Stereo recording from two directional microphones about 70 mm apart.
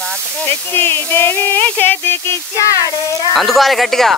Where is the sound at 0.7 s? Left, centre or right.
Left.